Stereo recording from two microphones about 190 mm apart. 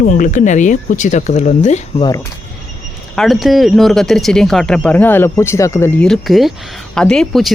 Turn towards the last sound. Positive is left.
turn(degrees=0)  # may be behind; listen again after turning